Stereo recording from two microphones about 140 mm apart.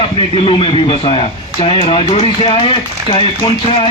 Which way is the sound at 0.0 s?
40° left (ahead or behind).